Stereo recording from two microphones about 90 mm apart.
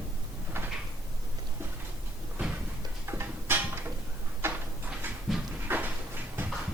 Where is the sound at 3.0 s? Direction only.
25° right (ahead or behind).